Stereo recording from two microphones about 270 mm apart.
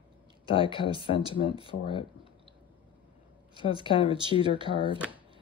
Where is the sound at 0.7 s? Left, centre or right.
Centre.